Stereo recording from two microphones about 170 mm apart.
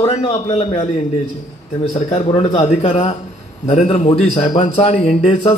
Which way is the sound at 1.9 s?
40° left (ahead or behind).